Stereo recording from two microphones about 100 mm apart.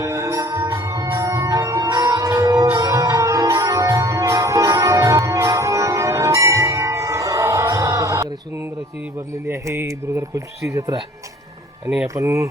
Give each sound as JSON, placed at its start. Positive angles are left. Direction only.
{"t": 0.0, "sound": "music", "side_deg": -30}
{"t": 9.5, "sound": "a sound", "side_deg": -25}
{"t": 12.0, "sound": "speech", "side_deg": -30}